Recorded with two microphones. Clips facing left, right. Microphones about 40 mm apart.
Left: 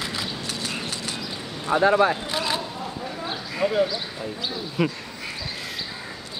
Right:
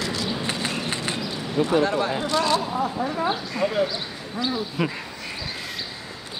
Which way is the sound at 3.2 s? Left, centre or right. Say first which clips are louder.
Left 2 dB; centre.